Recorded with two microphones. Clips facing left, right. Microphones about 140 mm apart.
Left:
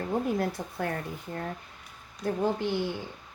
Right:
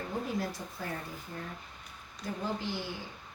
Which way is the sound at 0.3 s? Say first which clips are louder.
Left 6 dB; 60° left (ahead or behind).